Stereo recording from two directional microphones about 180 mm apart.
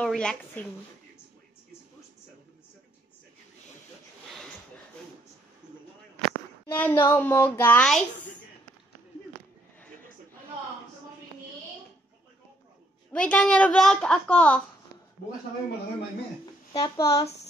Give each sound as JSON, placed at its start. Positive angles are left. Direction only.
{"t": 0.0, "sound": "speech", "side_deg": 5}
{"t": 5.6, "sound": "a sound", "side_deg": -25}
{"t": 6.7, "sound": "a woman's voice", "side_deg": 10}
{"t": 13.1, "sound": "a woman's voice", "side_deg": 5}
{"t": 16.7, "sound": "speech", "side_deg": 20}